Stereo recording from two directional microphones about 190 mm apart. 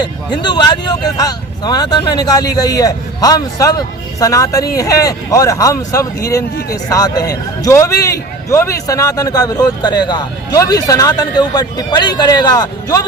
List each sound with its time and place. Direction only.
0.0 s speech: 25° left (ahead or behind)